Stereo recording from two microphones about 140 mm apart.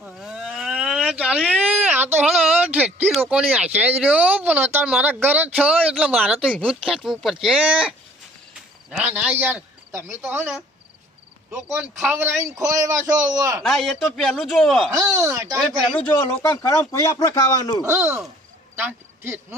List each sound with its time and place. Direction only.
0.0 s a sound: centre (ahead or behind)
3.2 s speech: 10° right (ahead or behind)
11.5 s speech: 15° right (ahead or behind)
13.7 s speech: centre (ahead or behind)
14.9 s speech: 25° right (ahead or behind)
15.5 s speech: centre (ahead or behind)
16.2 s speech: 20° left (ahead or behind)
17.8 s speech: 15° right (ahead or behind)